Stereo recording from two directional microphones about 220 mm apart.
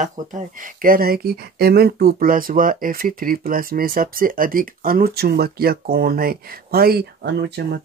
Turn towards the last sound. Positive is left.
turn(degrees=-50)  # may be behind; listen again after turning